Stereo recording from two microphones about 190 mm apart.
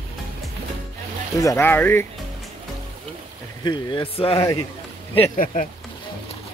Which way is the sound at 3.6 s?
25° left (ahead or behind).